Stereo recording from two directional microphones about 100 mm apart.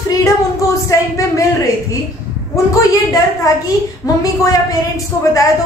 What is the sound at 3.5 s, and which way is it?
A woman's voice, 35° left (ahead or behind).